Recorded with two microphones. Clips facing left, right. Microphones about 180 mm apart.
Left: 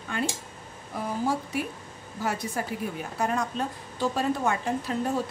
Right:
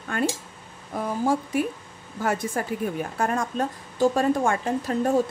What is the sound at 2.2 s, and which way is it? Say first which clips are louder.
A woman's voice: right 4 dB; 50° right (ahead or behind).